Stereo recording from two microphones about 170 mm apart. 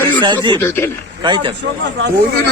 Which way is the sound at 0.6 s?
15° left (ahead or behind).